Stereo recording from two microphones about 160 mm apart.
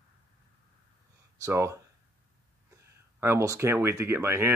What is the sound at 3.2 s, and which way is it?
Speech, 15° right (ahead or behind).